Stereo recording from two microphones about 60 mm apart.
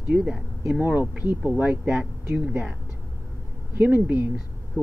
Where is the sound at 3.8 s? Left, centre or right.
Right.